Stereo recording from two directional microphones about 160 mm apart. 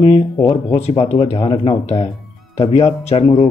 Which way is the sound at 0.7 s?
40° left (ahead or behind).